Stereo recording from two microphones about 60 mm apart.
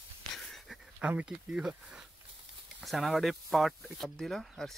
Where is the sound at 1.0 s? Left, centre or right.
Centre.